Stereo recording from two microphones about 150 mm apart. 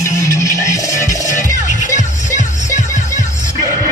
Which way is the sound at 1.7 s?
55° left (ahead or behind).